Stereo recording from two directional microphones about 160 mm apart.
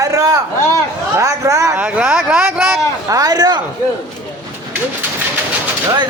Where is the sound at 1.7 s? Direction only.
10° right (ahead or behind).